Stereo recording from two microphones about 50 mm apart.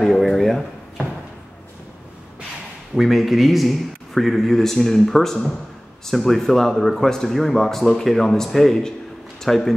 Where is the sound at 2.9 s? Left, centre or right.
Centre.